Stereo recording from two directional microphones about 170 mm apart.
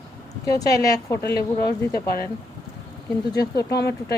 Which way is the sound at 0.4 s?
20° left (ahead or behind).